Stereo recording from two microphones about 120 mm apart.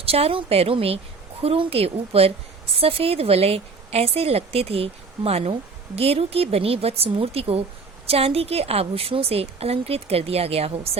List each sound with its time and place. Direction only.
0.0 s speech: 55° right (ahead or behind)